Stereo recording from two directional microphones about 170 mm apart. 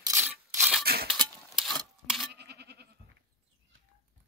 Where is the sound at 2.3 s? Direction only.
75° right (ahead or behind).